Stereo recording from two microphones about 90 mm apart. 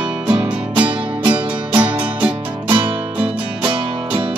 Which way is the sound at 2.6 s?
65° right (ahead or behind).